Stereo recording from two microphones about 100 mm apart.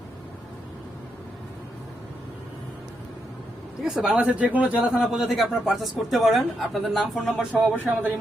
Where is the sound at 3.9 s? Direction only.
10° right (ahead or behind).